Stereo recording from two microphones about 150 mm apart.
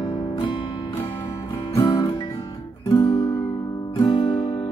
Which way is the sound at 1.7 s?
25° left (ahead or behind).